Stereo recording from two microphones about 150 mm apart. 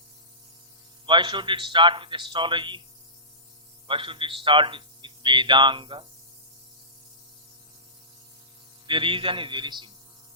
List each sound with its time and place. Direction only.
1.0 s a man's voice: 30° right (ahead or behind)
3.8 s a man's voice: 35° right (ahead or behind)
8.9 s a man's voice: 35° right (ahead or behind)